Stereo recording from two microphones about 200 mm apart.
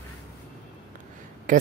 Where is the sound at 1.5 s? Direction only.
40° right (ahead or behind).